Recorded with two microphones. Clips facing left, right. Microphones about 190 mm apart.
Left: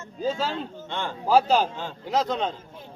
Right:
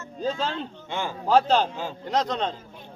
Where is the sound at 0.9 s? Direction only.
10° right (ahead or behind).